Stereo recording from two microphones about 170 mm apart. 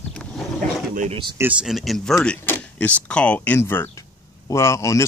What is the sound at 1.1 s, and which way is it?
Speech, 25° right (ahead or behind).